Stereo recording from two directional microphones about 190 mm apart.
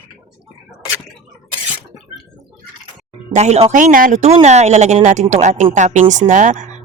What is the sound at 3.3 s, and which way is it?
Speech, 35° right (ahead or behind).